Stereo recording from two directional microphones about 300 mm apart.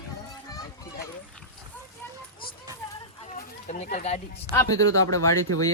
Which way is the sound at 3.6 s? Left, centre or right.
Left.